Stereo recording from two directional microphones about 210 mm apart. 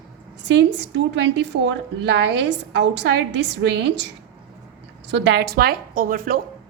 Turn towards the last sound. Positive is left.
turn(degrees=-45)  # may be behind; listen again after turning